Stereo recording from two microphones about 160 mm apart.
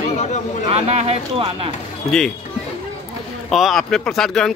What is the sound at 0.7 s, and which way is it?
Speech, 40° right (ahead or behind).